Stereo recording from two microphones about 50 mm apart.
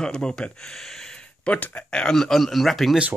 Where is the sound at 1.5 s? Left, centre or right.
Left.